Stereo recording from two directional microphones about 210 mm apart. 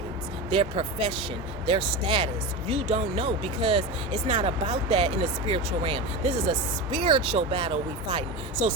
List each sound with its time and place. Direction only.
0.5 s speech: 25° right (ahead or behind)